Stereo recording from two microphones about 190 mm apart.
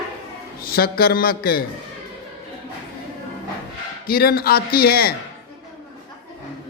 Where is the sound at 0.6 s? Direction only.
50° left (ahead or behind).